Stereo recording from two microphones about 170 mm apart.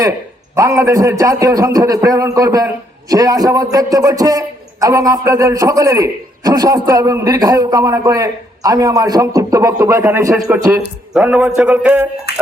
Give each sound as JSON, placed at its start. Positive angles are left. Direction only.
{"t": 0.5, "sound": "a man's voice", "side_deg": -15}
{"t": 10.8, "sound": "speech", "side_deg": -5}